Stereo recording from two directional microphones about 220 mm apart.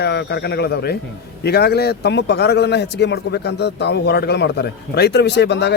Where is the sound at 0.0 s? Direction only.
50° left (ahead or behind).